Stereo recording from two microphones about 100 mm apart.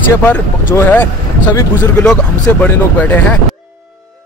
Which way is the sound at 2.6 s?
15° left (ahead or behind).